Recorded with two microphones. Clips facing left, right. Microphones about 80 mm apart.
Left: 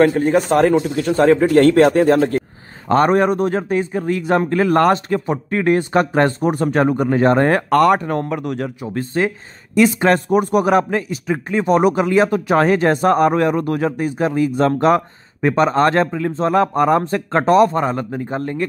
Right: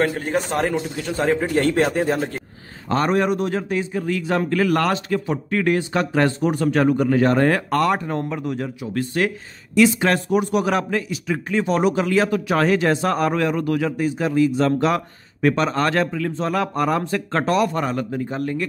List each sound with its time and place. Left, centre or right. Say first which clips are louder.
0.0 s speech: left 7 dB; left
2.9 s speech: left 5 dB; left
7.7 s speech: left 6 dB; left
8.8 s speech: left 2 dB; left
9.8 s speech: left 3 dB; left